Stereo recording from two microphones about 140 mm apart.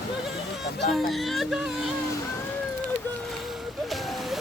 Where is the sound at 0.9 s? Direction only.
Centre (ahead or behind).